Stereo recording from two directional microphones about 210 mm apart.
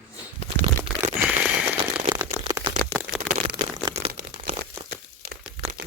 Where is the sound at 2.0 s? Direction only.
15° right (ahead or behind).